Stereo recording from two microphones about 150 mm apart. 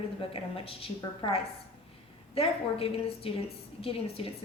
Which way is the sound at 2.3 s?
40° left (ahead or behind).